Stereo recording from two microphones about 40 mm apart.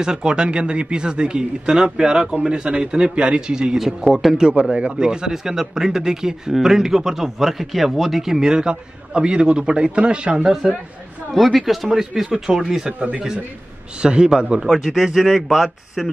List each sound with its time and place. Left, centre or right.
0.0 s speech: centre
3.7 s a man's voice: centre
4.5 s a man's voice: right
11.3 s a man's voice: centre
14.0 s speech: right
14.7 s a man's voice: centre